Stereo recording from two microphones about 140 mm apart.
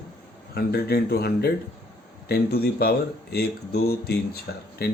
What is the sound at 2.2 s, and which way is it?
Speech, 90° left.